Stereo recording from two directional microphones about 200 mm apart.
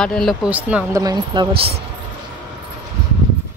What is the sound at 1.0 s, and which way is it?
Speech, 20° right (ahead or behind).